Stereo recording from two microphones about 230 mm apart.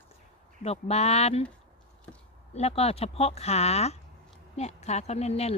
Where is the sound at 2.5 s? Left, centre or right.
Left.